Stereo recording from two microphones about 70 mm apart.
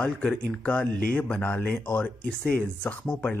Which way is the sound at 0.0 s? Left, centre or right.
Centre.